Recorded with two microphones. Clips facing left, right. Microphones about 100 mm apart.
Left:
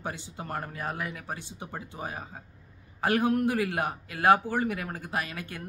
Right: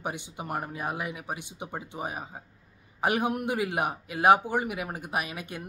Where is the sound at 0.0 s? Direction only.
15° right (ahead or behind).